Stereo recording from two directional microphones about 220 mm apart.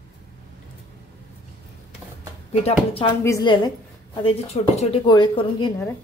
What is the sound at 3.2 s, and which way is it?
Speech, 15° left (ahead or behind).